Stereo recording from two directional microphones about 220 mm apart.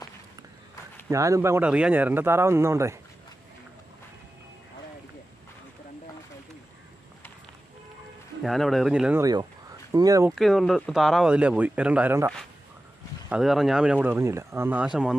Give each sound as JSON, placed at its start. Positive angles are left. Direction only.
{"t": 1.1, "sound": "speech", "side_deg": -15}
{"t": 8.4, "sound": "speech", "side_deg": 0}
{"t": 9.2, "sound": "speech", "side_deg": -15}
{"t": 10.3, "sound": "speech", "side_deg": 0}
{"t": 13.3, "sound": "speech", "side_deg": 0}